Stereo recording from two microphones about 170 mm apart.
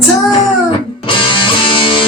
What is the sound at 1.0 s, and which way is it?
Music, 30° left (ahead or behind).